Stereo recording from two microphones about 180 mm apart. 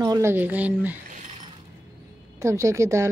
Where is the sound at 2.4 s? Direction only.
15° right (ahead or behind).